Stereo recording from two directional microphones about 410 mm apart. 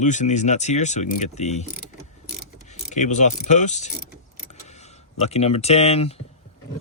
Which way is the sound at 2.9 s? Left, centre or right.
Centre.